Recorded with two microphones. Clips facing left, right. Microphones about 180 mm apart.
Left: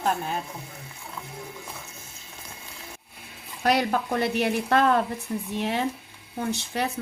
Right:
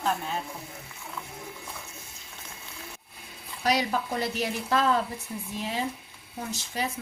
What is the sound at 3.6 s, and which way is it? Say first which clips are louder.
Speech: left 3 dB; 55° left (ahead or behind).